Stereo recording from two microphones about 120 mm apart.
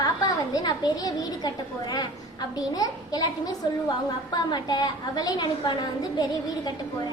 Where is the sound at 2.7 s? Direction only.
30° left (ahead or behind).